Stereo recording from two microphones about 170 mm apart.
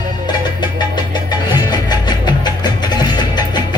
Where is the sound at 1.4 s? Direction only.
25° left (ahead or behind).